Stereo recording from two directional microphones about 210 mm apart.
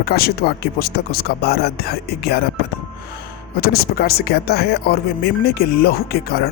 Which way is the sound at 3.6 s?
45° left (ahead or behind).